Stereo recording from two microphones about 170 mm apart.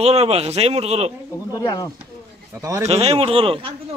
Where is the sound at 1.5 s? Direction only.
20° left (ahead or behind).